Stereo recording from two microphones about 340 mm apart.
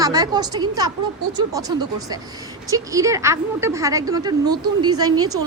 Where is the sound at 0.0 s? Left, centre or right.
Centre.